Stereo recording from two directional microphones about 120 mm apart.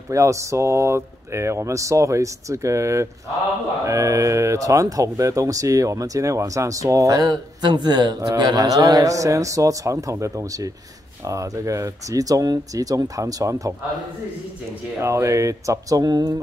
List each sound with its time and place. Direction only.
0.1 s speech: 25° right (ahead or behind)
15.0 s speech: 25° right (ahead or behind)